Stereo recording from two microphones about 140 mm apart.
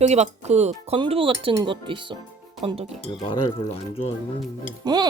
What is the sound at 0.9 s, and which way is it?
Speech, 40° right (ahead or behind).